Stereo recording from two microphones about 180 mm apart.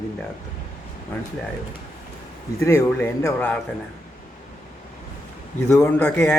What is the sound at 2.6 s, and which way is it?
Speech, 15° left (ahead or behind).